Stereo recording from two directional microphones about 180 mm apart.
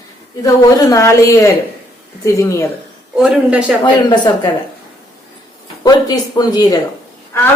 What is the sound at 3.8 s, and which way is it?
Speech, 25° left (ahead or behind).